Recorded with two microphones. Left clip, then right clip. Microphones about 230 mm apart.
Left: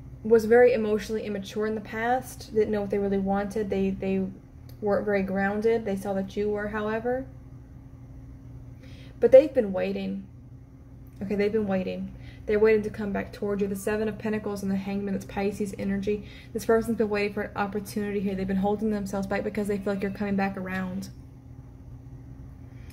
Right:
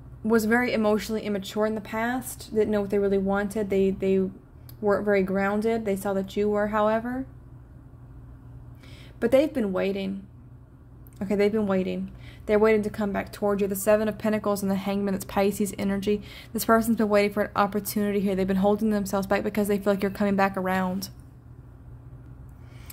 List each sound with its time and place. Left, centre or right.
0.3 s a woman's voice: right
9.2 s a woman's voice: right
11.1 s a woman's voice: right